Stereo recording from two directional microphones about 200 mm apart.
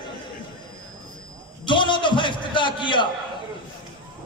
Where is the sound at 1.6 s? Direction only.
25° left (ahead or behind).